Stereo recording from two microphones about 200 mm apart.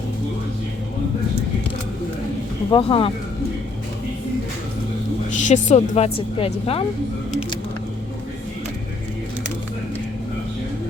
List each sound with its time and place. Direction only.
2.7 s speech: 25° left (ahead or behind)
5.3 s a woman's voice: 40° left (ahead or behind)